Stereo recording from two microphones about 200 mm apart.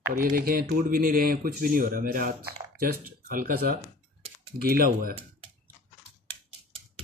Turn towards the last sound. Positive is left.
turn(degrees=-50)  # may be behind; listen again after turning